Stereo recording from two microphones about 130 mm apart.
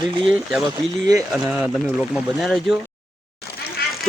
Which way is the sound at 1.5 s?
5° right (ahead or behind).